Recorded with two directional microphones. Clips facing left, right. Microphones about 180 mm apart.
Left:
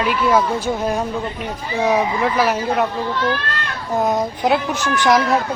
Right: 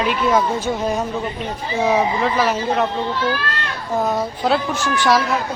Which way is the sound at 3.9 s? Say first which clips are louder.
Left 2 dB; 20° left (ahead or behind).